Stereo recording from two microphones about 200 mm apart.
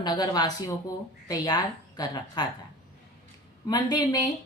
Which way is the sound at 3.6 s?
20° left (ahead or behind).